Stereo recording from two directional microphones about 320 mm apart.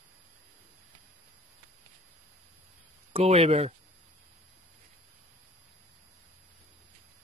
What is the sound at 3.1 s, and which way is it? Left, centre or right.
Speech, centre.